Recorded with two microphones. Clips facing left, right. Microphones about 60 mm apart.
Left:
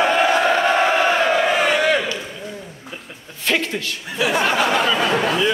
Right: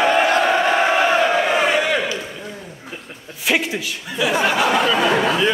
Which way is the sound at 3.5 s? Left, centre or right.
Centre.